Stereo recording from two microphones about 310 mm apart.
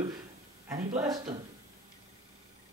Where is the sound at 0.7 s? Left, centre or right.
Centre.